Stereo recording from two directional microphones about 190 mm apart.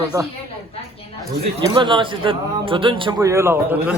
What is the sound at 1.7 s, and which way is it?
A man's voice, 25° right (ahead or behind).